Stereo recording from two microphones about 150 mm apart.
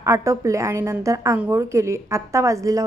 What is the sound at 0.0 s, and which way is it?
A woman's voice, 20° right (ahead or behind).